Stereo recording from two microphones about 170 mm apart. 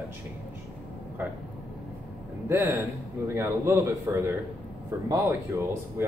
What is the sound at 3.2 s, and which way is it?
Speech, 15° right (ahead or behind).